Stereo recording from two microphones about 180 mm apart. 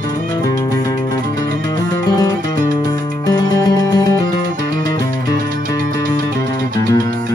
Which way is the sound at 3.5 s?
20° left (ahead or behind).